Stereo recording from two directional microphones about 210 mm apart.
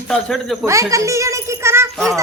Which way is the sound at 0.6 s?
15° right (ahead or behind).